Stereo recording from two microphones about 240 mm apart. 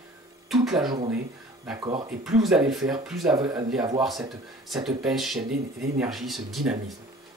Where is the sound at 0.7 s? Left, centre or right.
Right.